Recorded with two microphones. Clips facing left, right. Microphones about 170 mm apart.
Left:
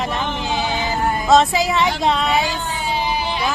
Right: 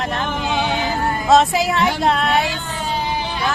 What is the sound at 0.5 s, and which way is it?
Music, 60° right (ahead or behind).